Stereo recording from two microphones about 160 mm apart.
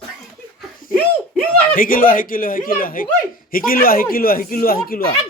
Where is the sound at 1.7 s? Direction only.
60° left (ahead or behind).